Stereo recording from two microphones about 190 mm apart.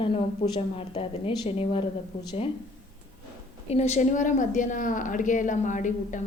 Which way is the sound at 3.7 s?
35° left (ahead or behind).